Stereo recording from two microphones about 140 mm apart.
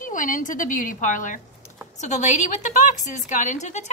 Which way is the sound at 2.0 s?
55° left (ahead or behind).